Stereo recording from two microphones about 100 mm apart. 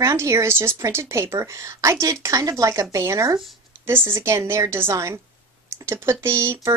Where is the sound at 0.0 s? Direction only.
30° right (ahead or behind).